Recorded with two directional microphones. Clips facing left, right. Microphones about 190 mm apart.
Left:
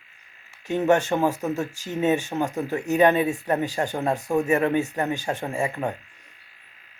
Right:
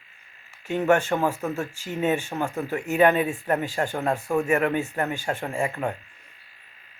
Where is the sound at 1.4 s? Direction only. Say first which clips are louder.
Left 2 dB; 20° left (ahead or behind).